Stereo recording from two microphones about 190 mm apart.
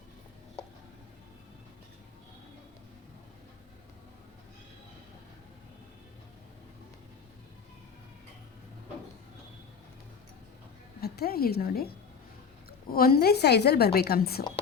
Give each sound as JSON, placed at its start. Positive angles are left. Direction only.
{"t": 11.0, "sound": "a woman's voice", "side_deg": 55}
{"t": 12.9, "sound": "a woman's voice", "side_deg": 55}